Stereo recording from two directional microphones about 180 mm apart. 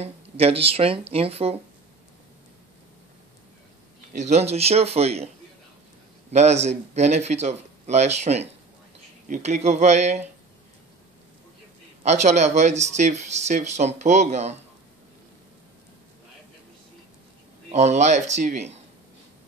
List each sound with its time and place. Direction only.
0.0 s speech: 35° right (ahead or behind)
4.1 s speech: 40° right (ahead or behind)
6.3 s speech: 40° right (ahead or behind)
12.0 s speech: 40° right (ahead or behind)
17.6 s speech: 40° right (ahead or behind)